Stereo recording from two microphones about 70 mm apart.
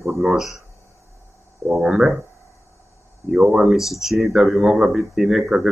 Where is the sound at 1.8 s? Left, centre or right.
Centre.